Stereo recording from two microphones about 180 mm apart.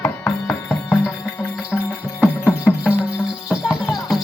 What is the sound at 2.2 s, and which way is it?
Music, 10° left (ahead or behind).